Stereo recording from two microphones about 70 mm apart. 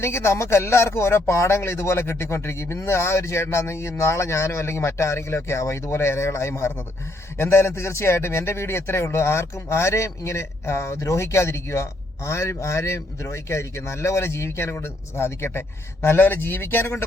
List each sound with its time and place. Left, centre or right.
0.0 s speech: left